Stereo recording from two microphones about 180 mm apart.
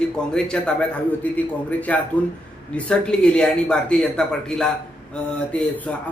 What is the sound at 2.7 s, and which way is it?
A man's voice, 5° left (ahead or behind).